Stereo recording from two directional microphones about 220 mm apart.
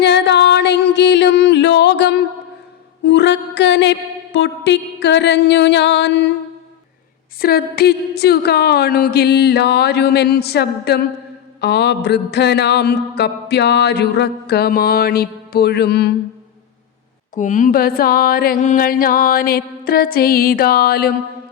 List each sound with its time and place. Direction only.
0.0 s music: 50° left (ahead or behind)
3.0 s mantra: 50° left (ahead or behind)
7.3 s mantra: 45° left (ahead or behind)
17.3 s mantra: 35° left (ahead or behind)